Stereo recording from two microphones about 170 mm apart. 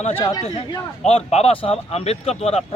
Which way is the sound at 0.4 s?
35° left (ahead or behind).